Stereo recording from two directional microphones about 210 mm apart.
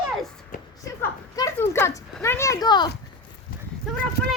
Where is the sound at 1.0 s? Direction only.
15° left (ahead or behind).